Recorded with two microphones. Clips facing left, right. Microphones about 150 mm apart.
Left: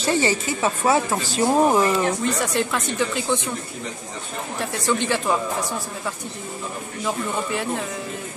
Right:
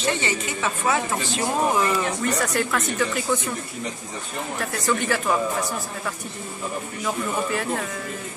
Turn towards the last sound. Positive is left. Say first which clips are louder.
# even
turn(degrees=20)  # may be behind; listen again after turning